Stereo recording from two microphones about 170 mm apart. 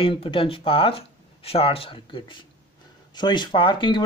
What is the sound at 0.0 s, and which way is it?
Speech, 30° left (ahead or behind).